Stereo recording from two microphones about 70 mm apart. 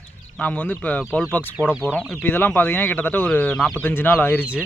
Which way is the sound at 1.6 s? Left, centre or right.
Right.